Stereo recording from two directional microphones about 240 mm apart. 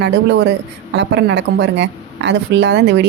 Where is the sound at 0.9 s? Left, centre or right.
Right.